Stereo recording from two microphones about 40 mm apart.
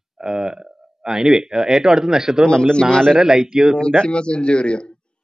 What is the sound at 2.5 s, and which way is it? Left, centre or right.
Speech, centre.